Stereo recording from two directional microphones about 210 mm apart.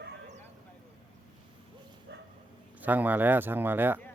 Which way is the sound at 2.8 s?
10° right (ahead or behind).